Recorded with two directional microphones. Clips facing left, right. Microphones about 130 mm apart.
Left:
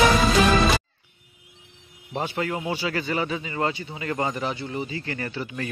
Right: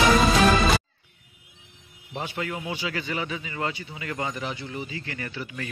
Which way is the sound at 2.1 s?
35° left (ahead or behind).